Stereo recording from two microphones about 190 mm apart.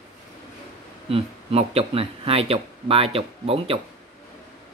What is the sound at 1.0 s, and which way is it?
Speech, 30° right (ahead or behind).